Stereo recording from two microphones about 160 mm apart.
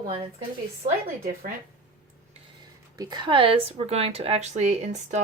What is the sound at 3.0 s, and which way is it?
Speech, 25° right (ahead or behind).